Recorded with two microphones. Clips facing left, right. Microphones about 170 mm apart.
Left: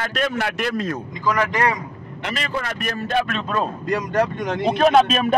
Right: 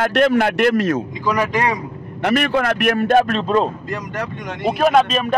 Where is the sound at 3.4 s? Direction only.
25° right (ahead or behind).